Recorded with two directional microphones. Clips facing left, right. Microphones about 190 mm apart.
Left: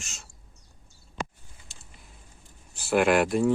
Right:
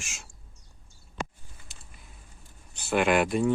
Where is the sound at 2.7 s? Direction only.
5° left (ahead or behind).